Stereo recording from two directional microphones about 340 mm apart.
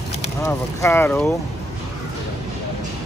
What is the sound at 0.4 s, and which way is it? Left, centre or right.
Speech, centre.